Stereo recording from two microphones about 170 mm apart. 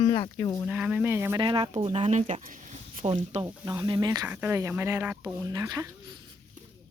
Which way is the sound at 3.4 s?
20° right (ahead or behind).